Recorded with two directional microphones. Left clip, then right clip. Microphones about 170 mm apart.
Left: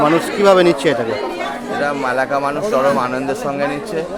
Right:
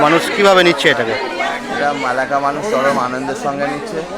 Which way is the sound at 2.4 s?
35° left (ahead or behind).